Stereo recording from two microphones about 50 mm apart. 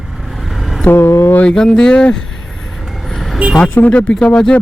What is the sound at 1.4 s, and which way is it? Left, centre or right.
Speech, centre.